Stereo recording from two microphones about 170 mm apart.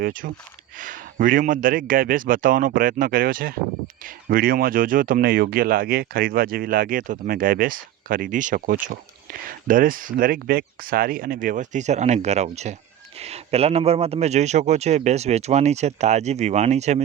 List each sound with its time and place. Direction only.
0.0 s a man's voice: 55° right (ahead or behind)